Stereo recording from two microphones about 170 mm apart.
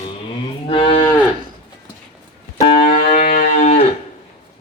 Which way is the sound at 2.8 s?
40° left (ahead or behind).